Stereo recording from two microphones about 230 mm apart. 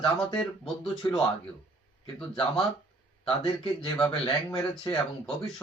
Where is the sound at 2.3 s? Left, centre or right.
Left.